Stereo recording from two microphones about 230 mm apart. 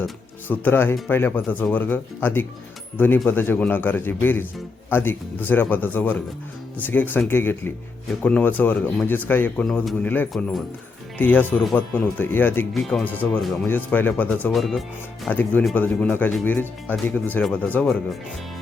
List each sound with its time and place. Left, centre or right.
0.4 s speech: centre